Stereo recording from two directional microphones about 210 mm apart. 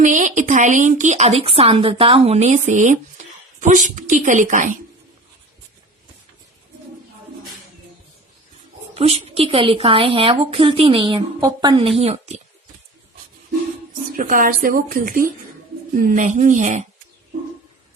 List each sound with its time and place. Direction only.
0.0 s speech: 35° right (ahead or behind)
9.0 s a woman's voice: 30° right (ahead or behind)
14.2 s speech: 40° right (ahead or behind)